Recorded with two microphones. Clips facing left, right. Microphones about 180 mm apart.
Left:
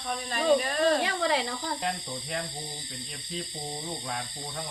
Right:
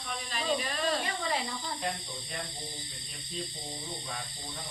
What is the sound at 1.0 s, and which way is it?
Speech, 85° left.